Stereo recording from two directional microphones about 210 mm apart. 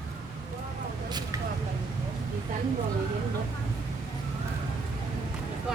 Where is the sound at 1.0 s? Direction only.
20° right (ahead or behind).